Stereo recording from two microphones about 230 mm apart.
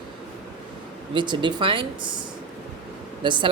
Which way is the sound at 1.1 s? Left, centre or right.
Centre.